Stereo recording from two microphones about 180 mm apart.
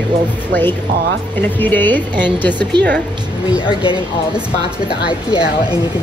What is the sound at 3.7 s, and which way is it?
Speech, 30° left (ahead or behind).